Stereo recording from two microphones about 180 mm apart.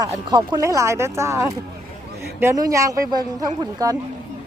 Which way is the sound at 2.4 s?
15° right (ahead or behind).